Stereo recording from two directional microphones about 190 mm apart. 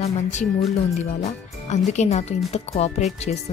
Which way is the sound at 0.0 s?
35° left (ahead or behind).